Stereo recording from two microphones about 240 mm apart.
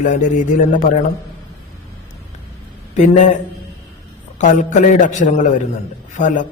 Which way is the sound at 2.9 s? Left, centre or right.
Left.